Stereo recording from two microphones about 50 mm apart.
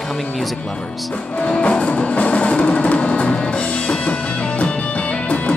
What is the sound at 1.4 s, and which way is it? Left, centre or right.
Music, centre.